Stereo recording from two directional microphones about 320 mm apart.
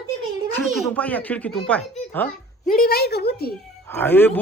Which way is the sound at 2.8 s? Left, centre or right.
Left.